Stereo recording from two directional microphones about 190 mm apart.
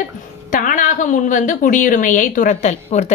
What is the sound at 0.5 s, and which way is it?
A woman's voice, 45° left (ahead or behind).